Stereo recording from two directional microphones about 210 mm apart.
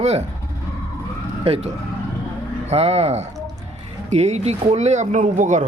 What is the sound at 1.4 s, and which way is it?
Speech, 30° right (ahead or behind).